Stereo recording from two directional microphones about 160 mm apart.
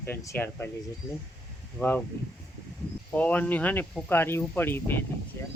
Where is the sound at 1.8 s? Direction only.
10° left (ahead or behind).